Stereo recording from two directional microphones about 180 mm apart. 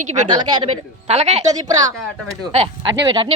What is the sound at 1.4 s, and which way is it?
Speech, 20° right (ahead or behind).